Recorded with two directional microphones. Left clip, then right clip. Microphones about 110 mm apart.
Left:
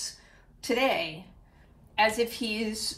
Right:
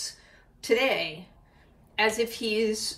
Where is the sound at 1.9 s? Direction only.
35° left (ahead or behind).